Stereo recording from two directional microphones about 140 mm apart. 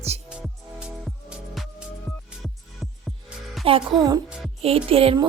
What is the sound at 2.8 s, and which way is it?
Music, centre (ahead or behind).